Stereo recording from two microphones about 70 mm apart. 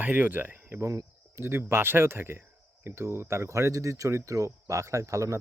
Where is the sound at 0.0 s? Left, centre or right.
Right.